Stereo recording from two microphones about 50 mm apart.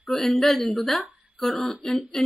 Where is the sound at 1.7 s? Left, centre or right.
Left.